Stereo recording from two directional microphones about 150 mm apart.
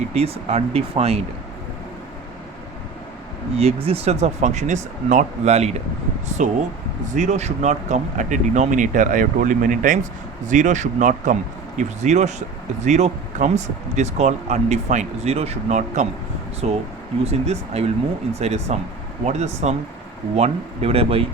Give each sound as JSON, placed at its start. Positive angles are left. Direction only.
{"t": 0.1, "sound": "speech", "side_deg": -45}
{"t": 3.5, "sound": "speech", "side_deg": -45}